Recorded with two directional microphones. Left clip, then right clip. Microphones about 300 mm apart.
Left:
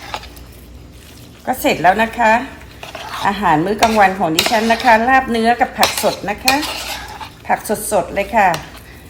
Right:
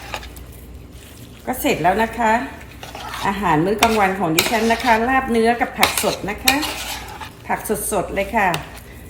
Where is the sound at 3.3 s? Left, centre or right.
Left.